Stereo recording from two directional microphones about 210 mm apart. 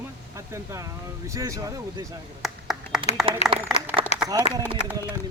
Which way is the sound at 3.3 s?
25° right (ahead or behind).